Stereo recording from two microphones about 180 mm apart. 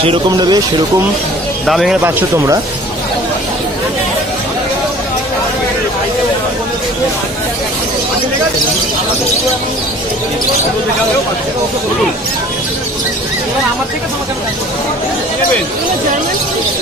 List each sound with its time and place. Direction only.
0.0 s speech: 25° right (ahead or behind)
1.7 s speech: centre (ahead or behind)
2.0 s speech: 15° right (ahead or behind)